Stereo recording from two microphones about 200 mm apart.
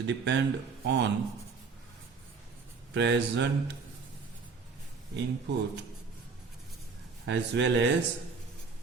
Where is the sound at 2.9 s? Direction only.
60° right (ahead or behind).